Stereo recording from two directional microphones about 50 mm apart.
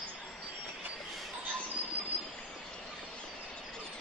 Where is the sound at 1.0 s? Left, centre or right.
Centre.